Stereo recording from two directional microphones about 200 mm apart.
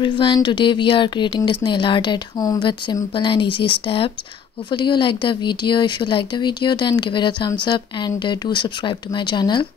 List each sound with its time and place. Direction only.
0.0 s speech: 25° left (ahead or behind)